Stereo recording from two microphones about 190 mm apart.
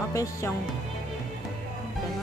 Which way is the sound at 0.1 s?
15° left (ahead or behind).